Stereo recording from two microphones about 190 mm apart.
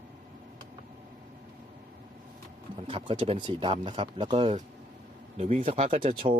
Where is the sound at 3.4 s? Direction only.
25° right (ahead or behind).